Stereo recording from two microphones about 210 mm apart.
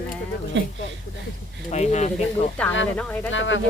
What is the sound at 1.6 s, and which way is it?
Speech, 35° left (ahead or behind).